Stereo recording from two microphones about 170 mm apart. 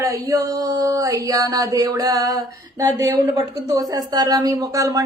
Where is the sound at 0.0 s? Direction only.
20° right (ahead or behind).